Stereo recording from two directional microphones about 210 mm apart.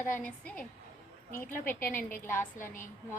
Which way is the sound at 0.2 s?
5° left (ahead or behind).